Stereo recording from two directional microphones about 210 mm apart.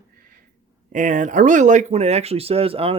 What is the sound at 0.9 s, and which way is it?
Speech, 35° right (ahead or behind).